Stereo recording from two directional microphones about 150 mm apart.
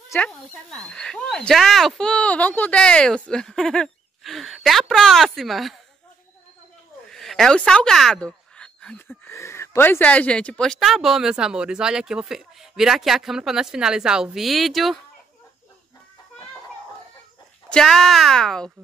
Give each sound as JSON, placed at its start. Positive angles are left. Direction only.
{"t": 0.3, "sound": "a woman's voice", "side_deg": 5}
{"t": 7.1, "sound": "speech", "side_deg": 0}
{"t": 17.6, "sound": "speech", "side_deg": 5}